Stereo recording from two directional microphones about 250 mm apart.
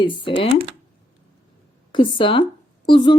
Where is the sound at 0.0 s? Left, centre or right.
Centre.